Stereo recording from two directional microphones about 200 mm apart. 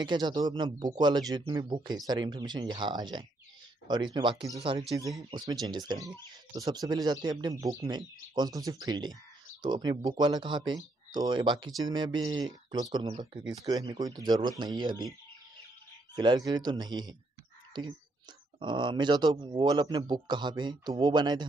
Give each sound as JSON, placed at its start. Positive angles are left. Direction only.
{"t": 0.0, "sound": "speech", "side_deg": -20}
{"t": 16.2, "sound": "speech", "side_deg": -20}